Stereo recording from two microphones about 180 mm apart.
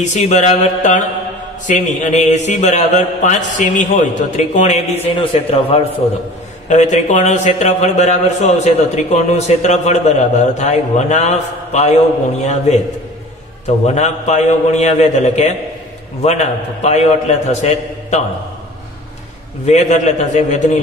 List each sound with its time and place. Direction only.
0.0 s a man's voice: 40° left (ahead or behind)
5.0 s a man's voice: 30° left (ahead or behind)
13.8 s a man's voice: 40° left (ahead or behind)
19.6 s a man's voice: 40° left (ahead or behind)